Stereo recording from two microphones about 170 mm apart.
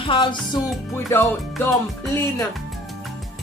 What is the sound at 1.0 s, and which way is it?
Speech, 20° left (ahead or behind).